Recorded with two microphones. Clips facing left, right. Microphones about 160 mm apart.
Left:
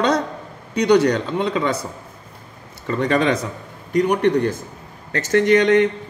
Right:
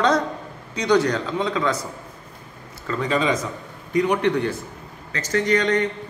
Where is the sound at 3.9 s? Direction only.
45° left (ahead or behind).